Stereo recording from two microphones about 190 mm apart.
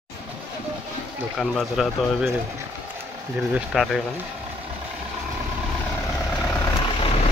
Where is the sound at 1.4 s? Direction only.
Centre (ahead or behind).